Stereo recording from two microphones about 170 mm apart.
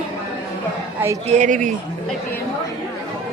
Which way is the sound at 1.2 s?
45° right (ahead or behind).